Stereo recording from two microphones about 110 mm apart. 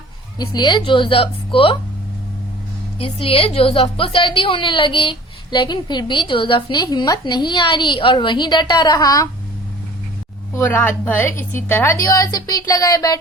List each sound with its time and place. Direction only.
0.3 s a woman's voice: 40° left (ahead or behind); by 1.7 s 55° left (ahead or behind)
3.0 s a woman's voice: 60° left (ahead or behind); by 9.3 s 35° left (ahead or behind)
10.5 s a woman's voice: 20° left (ahead or behind)